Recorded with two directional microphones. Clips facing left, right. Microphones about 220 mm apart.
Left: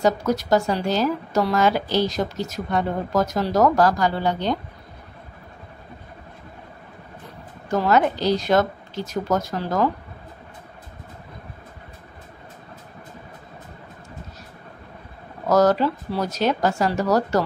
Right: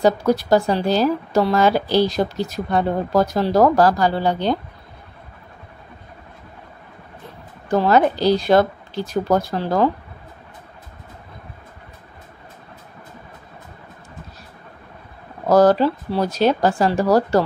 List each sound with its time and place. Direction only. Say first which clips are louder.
0.0 s a woman's voice: right 4 dB; 30° right (ahead or behind)
7.7 s a woman's voice: right 3 dB; 30° right (ahead or behind)
15.4 s a woman's voice: right 4 dB; 30° right (ahead or behind)